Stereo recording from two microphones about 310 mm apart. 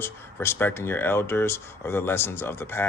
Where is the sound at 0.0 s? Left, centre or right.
Centre.